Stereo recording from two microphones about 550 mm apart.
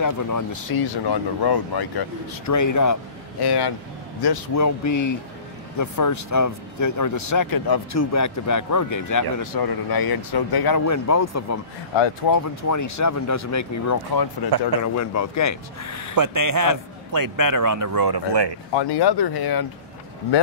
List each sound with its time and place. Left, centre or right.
0.0 s speech: left
2.4 s speech: left
11.9 s speech: left
12.3 s speech: left
16.2 s a man's voice: right
18.7 s speech: left